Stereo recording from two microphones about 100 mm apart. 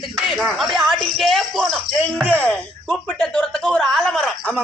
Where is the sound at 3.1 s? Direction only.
5° left (ahead or behind).